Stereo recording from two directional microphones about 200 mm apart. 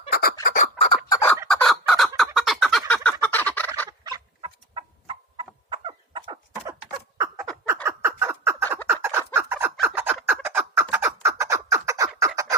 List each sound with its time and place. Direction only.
0.1 s fowl: 50° left (ahead or behind); by 1.3 s 25° left (ahead or behind)
1.5 s fowl: centre (ahead or behind)
4.0 s chicken: 25° right (ahead or behind)
7.9 s bird: 10° right (ahead or behind)
8.9 s fowl: 10° right (ahead or behind)
10.9 s bird: 15° right (ahead or behind)